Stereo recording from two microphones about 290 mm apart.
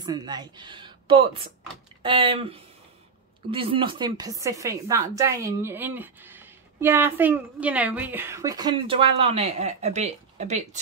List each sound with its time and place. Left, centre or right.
0.0 s speech: centre